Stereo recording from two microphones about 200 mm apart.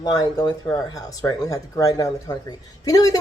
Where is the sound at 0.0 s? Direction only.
20° left (ahead or behind).